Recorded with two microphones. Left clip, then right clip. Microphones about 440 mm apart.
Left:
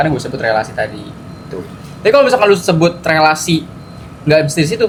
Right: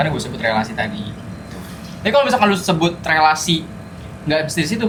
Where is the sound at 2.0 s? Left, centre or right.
Left.